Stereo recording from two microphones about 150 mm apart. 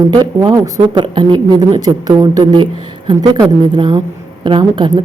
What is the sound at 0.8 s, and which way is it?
A woman's voice, 35° right (ahead or behind).